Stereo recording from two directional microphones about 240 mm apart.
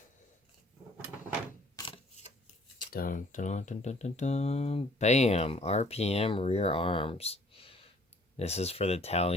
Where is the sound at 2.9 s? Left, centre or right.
Left.